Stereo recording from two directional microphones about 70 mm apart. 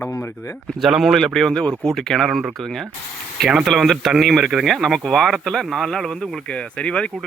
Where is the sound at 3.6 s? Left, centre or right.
Centre.